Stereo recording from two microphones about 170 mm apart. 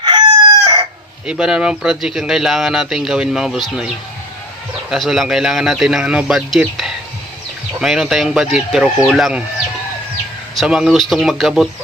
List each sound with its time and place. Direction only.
0.0 s chicken: 25° right (ahead or behind)
1.3 s speech: 5° right (ahead or behind)
10.5 s speech: centre (ahead or behind)